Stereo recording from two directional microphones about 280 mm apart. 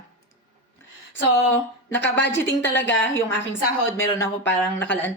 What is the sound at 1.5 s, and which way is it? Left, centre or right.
Speech, centre.